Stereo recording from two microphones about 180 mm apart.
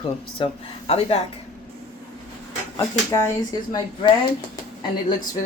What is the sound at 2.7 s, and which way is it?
Speech, 15° left (ahead or behind).